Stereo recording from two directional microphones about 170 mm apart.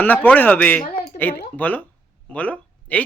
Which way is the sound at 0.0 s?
10° left (ahead or behind).